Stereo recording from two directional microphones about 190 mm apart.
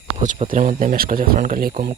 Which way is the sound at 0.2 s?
40° right (ahead or behind).